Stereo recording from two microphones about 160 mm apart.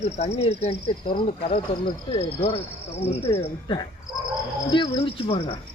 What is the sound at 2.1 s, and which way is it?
Speech, 40° left (ahead or behind).